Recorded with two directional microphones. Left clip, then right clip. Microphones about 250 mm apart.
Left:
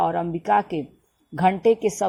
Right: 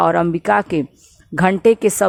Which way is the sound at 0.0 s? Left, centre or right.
Right.